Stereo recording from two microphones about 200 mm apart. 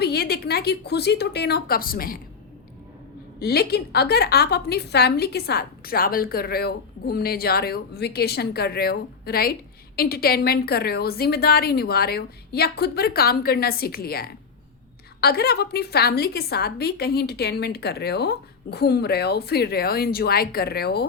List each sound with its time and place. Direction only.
0.0 s a woman's voice: 50° left (ahead or behind)
3.4 s a woman's voice: 55° left (ahead or behind)